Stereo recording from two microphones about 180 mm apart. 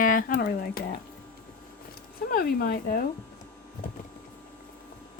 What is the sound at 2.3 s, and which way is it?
Speech, 55° left (ahead or behind).